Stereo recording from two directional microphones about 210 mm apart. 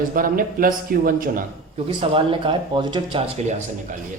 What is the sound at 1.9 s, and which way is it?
Speech, 25° right (ahead or behind).